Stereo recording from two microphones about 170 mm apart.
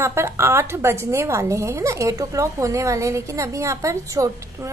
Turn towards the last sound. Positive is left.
turn(degrees=-15)  # may be behind; listen again after turning